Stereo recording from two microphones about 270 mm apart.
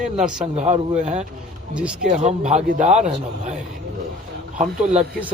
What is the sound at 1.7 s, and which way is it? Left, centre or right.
Speech, centre.